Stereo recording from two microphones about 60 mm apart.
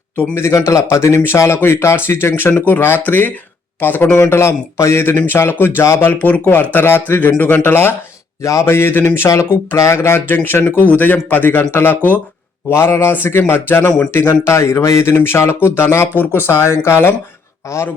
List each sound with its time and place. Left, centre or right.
0.2 s speech: left
4.2 s speech: left
6.3 s speech: left
8.4 s speech: left
8.6 s speech: left
12.7 s speech: left
14.4 s speech: left
17.7 s speech: left